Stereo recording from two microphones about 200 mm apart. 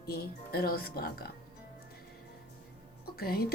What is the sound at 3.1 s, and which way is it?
Speech, 50° left (ahead or behind).